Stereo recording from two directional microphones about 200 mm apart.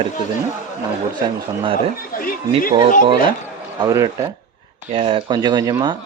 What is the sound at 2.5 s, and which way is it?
Speech, 30° right (ahead or behind).